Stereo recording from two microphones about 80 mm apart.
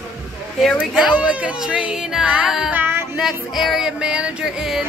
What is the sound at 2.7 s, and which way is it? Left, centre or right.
Speech, right.